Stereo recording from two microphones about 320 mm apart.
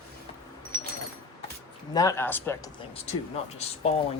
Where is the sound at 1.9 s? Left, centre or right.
Centre.